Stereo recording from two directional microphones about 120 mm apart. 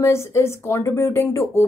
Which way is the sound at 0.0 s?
20° left (ahead or behind).